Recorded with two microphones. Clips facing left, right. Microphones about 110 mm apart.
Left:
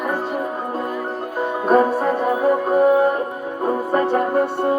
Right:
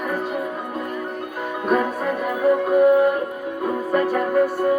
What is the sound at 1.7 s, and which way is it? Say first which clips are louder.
Music: left 5 dB; 35° left (ahead or behind).